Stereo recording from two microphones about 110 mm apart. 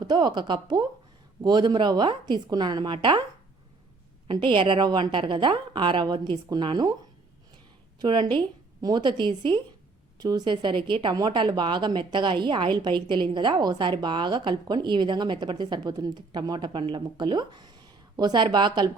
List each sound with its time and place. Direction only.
0.0 s speech: 40° right (ahead or behind)
4.3 s speech: 50° right (ahead or behind)
7.9 s a woman's voice: 45° right (ahead or behind)